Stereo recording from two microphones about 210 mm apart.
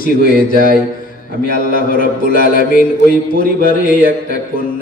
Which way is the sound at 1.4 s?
40° left (ahead or behind).